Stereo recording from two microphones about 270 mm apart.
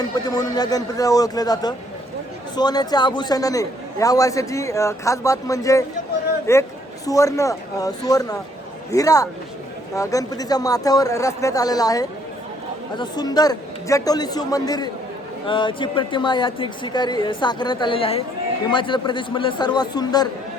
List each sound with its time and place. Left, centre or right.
0.0 s a man's voice: centre